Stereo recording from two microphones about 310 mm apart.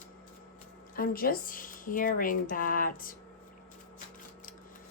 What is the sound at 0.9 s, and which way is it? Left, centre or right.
A woman's voice, left.